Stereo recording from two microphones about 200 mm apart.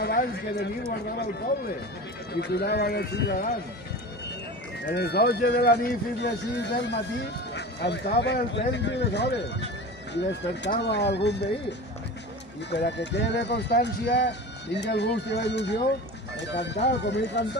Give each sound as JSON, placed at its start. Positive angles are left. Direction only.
{"t": 0.0, "sound": "speech", "side_deg": 50}
{"t": 2.3, "sound": "speech", "side_deg": 55}
{"t": 4.8, "sound": "speech", "side_deg": 55}
{"t": 12.7, "sound": "speech", "side_deg": 60}